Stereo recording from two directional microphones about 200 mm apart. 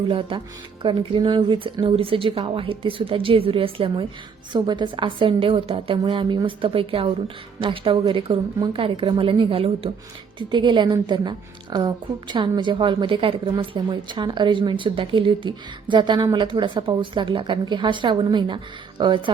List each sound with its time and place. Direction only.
0.1 s a woman's voice: 25° right (ahead or behind)